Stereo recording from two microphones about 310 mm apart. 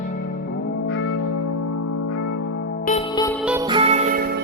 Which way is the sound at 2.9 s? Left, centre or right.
Centre.